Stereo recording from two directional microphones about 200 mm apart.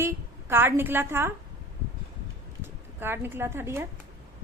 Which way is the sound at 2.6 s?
10° right (ahead or behind).